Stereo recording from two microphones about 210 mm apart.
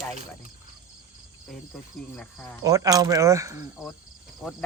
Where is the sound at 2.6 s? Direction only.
15° right (ahead or behind).